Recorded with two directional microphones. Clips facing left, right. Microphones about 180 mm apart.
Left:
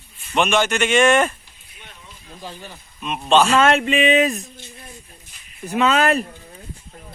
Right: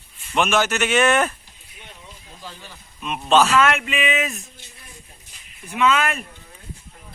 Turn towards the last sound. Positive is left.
turn(degrees=35)  # may be behind; listen again after turning